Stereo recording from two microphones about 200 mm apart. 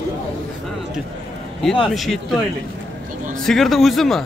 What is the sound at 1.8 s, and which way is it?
Speech, centre (ahead or behind).